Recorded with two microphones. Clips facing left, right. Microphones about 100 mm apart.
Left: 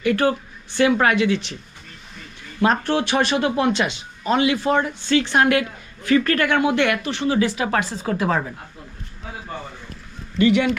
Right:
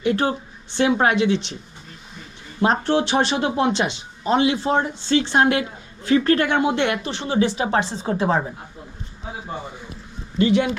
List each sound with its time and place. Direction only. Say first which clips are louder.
0.0 s speech: left 2 dB; 25° right (ahead or behind)
2.6 s speech: even; 20° right (ahead or behind)
10.3 s speech: left 1 dB; 20° right (ahead or behind)